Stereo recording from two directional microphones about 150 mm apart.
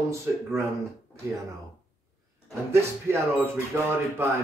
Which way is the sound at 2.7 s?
15° right (ahead or behind).